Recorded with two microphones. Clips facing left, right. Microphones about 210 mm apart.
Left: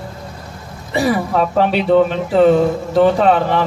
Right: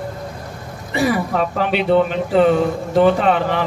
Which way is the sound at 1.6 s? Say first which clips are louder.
Left 5 dB; 40° left (ahead or behind).